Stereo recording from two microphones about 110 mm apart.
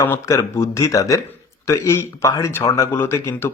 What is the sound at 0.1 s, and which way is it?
A man's voice, 25° left (ahead or behind).